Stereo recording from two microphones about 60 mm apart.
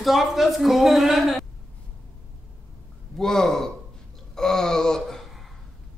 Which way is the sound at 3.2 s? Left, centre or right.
Centre.